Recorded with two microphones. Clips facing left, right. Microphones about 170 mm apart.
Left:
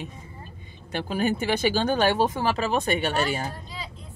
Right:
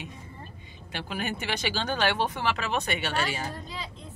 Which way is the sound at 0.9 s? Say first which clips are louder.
Left 8 dB; 40° left (ahead or behind).